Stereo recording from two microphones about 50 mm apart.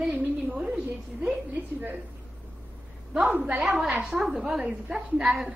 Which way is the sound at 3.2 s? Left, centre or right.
Right.